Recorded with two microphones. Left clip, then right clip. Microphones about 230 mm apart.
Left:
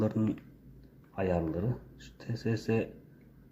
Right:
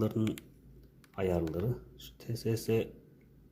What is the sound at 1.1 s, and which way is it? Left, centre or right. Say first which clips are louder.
Speech: left 1 dB; centre.